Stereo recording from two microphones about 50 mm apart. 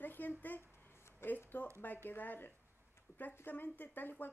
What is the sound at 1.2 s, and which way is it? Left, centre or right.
Speech, left.